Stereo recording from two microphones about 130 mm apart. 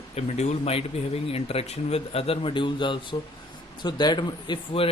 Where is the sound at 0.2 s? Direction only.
60° left (ahead or behind).